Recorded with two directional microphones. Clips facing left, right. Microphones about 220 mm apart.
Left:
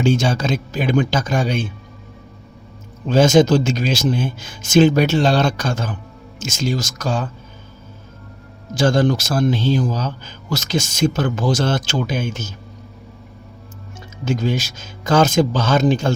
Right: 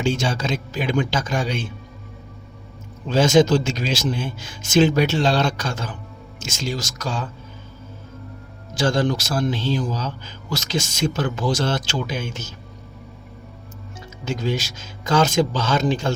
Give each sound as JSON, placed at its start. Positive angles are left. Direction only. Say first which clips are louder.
{"t": 0.0, "sound": "speech", "louder": "left 5 dB", "side_deg": 45}
{"t": 3.1, "sound": "speech", "louder": "left 3 dB", "side_deg": 45}
{"t": 8.7, "sound": "speech", "louder": "left 4 dB", "side_deg": 45}
{"t": 14.3, "sound": "speech", "louder": "left 4 dB", "side_deg": 45}